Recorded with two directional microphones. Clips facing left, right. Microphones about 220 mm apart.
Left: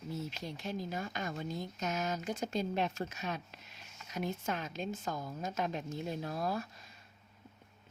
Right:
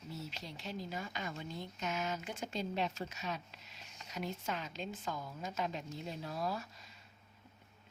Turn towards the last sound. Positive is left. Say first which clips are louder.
# left 3 dB
turn(degrees=50)  # may be behind; listen again after turning